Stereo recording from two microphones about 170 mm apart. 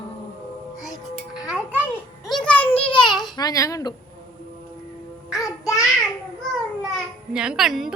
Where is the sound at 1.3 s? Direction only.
5° right (ahead or behind).